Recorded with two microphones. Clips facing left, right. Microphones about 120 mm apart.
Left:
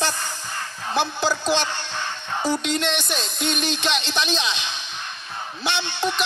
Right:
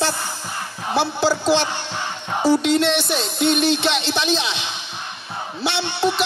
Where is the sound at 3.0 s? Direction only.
15° right (ahead or behind).